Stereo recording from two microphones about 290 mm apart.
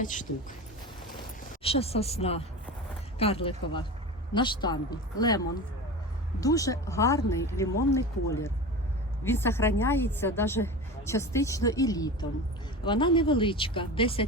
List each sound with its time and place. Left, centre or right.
0.0 s speech: left
1.6 s a woman's voice: centre
6.4 s a woman's voice: centre